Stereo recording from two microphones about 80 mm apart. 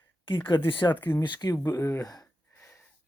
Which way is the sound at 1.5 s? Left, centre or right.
Left.